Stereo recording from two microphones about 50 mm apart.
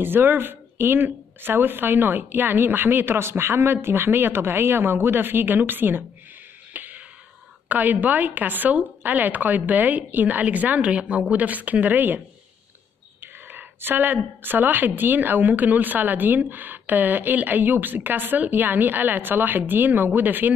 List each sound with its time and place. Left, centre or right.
0.0 s speech: right
6.7 s a sound: right
7.6 s speech: right
13.2 s speech: right